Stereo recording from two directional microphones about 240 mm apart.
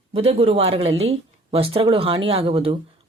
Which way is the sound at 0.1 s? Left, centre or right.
Right.